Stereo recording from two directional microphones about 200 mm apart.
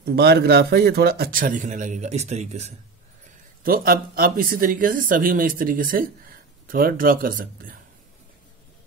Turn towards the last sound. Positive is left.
turn(degrees=-45)  # may be behind; listen again after turning